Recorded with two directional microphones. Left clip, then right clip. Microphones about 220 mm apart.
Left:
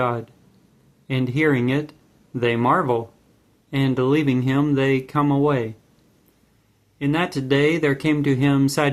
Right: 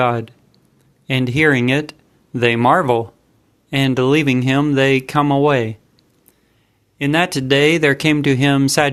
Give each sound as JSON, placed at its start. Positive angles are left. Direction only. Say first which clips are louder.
{"t": 0.0, "sound": "speech", "louder": "right 6 dB", "side_deg": -30}
{"t": 7.0, "sound": "speech", "louder": "right 6 dB", "side_deg": -30}